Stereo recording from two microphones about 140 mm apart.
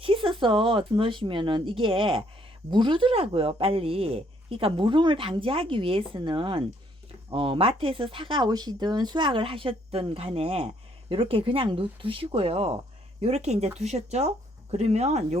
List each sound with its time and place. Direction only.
0.0 s speech: 40° right (ahead or behind)